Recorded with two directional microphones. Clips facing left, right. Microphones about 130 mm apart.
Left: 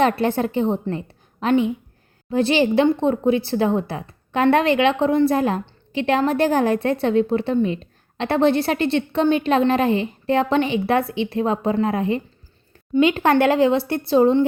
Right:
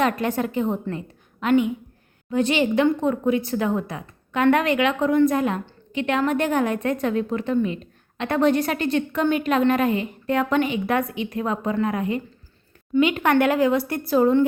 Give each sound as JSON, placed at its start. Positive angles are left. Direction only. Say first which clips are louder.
{"t": 0.0, "sound": "speech", "louder": "left 4 dB", "side_deg": 30}